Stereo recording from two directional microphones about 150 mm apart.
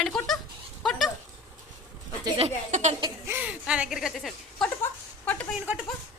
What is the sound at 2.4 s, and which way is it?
Speech, 50° right (ahead or behind).